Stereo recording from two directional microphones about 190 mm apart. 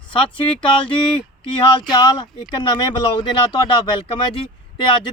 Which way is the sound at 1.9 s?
20° left (ahead or behind).